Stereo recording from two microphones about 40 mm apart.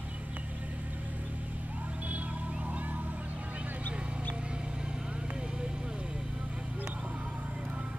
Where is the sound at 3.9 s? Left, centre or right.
Right.